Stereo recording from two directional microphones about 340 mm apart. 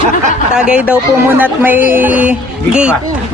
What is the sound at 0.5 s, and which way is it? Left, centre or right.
A woman's voice, centre.